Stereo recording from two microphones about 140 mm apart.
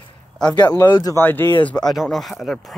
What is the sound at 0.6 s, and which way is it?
Speech, 25° left (ahead or behind).